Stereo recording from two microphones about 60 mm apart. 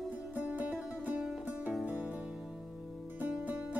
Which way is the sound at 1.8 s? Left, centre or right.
Right.